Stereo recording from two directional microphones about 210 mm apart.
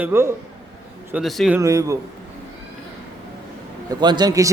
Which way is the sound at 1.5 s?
15° right (ahead or behind).